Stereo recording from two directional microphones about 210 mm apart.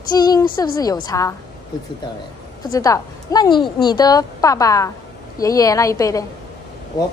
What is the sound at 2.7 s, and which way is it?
A woman's voice, 15° left (ahead or behind).